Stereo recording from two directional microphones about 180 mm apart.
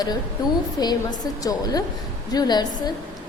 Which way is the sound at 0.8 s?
20° left (ahead or behind).